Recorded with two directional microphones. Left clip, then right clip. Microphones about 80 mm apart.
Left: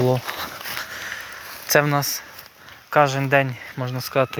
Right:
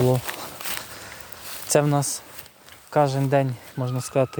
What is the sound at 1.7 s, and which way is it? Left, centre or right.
Speech, right.